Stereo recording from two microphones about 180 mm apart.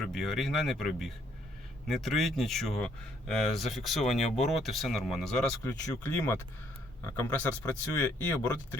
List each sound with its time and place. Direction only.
0.0 s speech: centre (ahead or behind)